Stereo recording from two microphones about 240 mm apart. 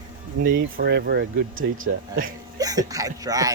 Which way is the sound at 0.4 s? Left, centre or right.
Right.